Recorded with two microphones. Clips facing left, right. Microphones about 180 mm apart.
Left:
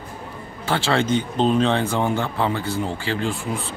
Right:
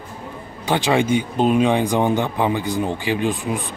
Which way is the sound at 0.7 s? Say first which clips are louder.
Right 3 dB; 15° right (ahead or behind).